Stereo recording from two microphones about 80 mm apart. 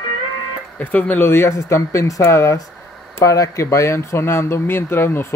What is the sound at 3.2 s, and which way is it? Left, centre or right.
Speech, left.